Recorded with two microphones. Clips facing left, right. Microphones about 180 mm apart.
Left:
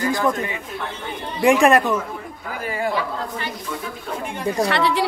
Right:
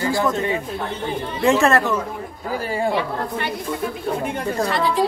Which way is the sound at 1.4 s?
15° left (ahead or behind).